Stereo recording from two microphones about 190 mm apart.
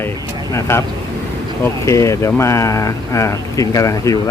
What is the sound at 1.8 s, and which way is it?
Speech, 15° left (ahead or behind).